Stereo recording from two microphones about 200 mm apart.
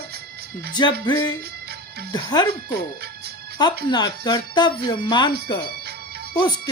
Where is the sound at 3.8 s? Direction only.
20° left (ahead or behind).